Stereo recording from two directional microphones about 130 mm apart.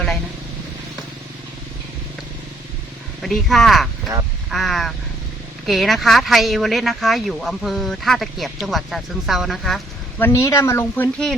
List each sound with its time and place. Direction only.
3.2 s speech: centre (ahead or behind)
10.2 s speech: 20° left (ahead or behind)